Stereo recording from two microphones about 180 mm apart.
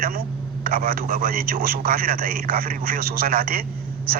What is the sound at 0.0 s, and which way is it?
A man's voice, 55° right (ahead or behind).